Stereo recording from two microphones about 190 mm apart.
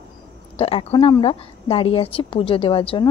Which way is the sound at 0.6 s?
30° left (ahead or behind).